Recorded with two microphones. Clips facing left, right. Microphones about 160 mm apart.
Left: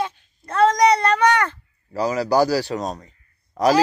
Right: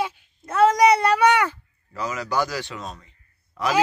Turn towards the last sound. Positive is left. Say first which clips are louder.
# left 7 dB
turn(degrees=40)  # may be behind; listen again after turning